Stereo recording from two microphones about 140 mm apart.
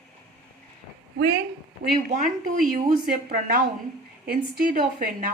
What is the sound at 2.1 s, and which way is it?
Speech, 65° right (ahead or behind).